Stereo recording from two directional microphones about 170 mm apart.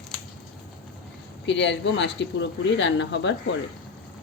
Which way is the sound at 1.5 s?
90° left.